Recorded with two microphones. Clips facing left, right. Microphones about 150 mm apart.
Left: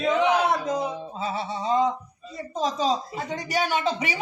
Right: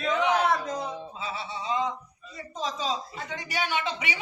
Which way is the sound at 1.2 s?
45° left (ahead or behind).